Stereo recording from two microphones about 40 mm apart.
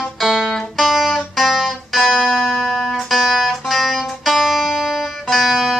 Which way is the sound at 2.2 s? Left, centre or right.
Centre.